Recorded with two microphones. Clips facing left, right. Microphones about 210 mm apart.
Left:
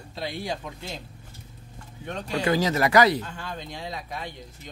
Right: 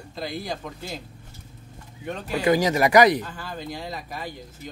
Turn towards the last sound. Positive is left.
turn(degrees=-5)  # may be behind; listen again after turning